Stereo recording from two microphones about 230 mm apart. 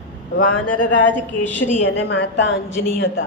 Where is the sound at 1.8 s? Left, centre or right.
Left.